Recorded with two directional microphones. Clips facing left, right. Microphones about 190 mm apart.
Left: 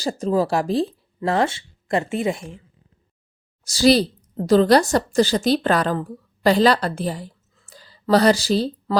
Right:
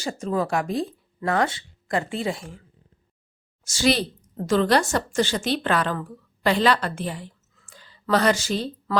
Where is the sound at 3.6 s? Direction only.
35° left (ahead or behind).